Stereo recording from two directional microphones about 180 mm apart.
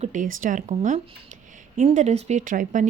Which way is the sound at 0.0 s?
45° right (ahead or behind).